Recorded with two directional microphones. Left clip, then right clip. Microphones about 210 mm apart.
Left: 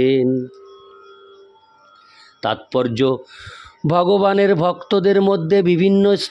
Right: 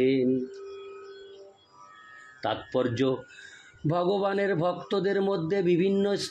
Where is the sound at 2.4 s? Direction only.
50° left (ahead or behind).